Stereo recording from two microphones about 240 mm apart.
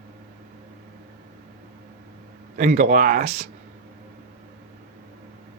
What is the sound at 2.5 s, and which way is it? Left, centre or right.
Speech, right.